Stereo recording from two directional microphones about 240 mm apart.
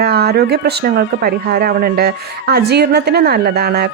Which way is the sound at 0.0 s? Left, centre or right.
Right.